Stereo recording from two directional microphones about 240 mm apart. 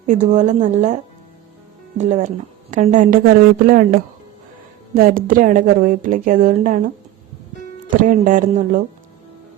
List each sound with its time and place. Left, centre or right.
0.1 s a woman's voice: right
2.0 s a woman's voice: right
8.0 s a woman's voice: right